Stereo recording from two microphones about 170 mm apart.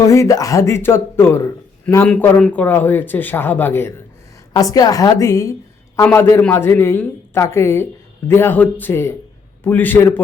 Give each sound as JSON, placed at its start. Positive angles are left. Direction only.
{"t": 0.0, "sound": "a woman's voice", "side_deg": 20}